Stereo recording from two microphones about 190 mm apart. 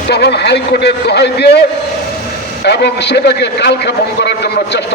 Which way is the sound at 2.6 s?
60° left (ahead or behind).